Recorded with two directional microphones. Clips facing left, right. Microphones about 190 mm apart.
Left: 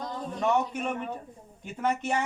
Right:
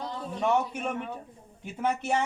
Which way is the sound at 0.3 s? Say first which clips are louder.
Even; 10° right (ahead or behind).